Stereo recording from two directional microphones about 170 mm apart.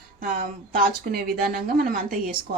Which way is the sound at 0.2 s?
55° right (ahead or behind).